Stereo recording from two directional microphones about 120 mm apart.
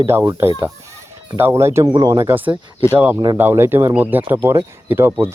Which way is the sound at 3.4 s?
20° right (ahead or behind).